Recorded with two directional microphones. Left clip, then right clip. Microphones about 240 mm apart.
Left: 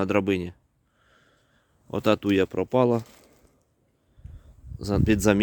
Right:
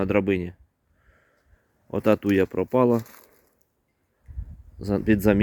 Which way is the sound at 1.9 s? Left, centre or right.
Centre.